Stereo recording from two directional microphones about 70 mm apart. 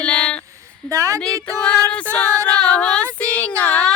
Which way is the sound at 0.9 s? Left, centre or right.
Right.